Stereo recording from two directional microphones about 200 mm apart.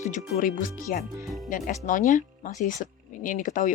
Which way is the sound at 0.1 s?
45° left (ahead or behind).